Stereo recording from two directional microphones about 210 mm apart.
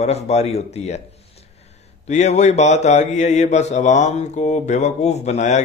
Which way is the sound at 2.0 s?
35° left (ahead or behind).